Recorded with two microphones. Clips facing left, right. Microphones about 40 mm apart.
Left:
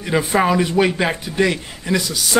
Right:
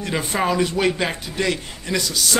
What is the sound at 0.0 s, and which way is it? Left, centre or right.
A man's voice, centre.